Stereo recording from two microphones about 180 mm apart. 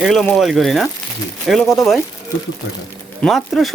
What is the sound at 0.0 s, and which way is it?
Speech, centre (ahead or behind).